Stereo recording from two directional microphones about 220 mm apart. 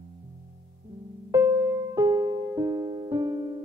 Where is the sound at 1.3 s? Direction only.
10° right (ahead or behind).